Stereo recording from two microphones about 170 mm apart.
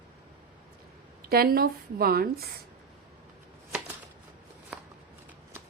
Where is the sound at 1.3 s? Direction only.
60° right (ahead or behind).